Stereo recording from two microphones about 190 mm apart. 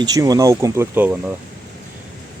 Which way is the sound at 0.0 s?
20° right (ahead or behind).